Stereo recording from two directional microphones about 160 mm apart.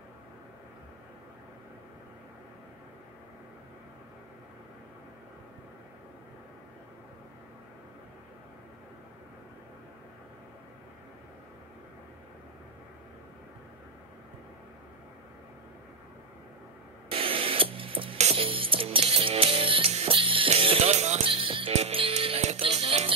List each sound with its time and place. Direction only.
17.1 s music: 35° right (ahead or behind)